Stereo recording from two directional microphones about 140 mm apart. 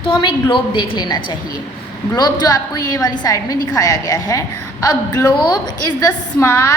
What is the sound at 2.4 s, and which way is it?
A woman's voice, 30° left (ahead or behind).